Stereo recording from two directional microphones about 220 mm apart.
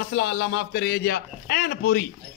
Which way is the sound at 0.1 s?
45° left (ahead or behind).